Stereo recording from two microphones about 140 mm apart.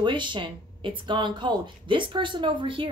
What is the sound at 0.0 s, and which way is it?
Speech, 35° right (ahead or behind).